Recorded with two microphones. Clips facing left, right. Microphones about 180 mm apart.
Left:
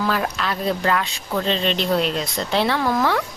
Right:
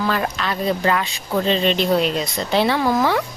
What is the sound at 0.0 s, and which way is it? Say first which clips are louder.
Speech: right 1 dB; centre (ahead or behind).